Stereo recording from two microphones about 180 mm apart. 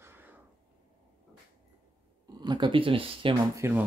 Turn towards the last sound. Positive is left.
turn(degrees=-15)  # may be behind; listen again after turning